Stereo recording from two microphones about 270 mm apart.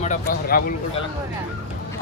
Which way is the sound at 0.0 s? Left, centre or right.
Left.